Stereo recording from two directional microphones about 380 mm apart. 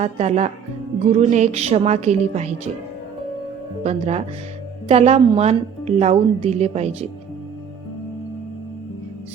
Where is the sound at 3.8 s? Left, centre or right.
Centre.